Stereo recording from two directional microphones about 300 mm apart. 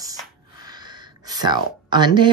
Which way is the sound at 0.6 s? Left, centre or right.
Centre.